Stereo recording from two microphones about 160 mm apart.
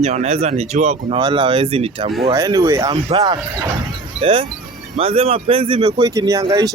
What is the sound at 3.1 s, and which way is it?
Speech, 35° right (ahead or behind).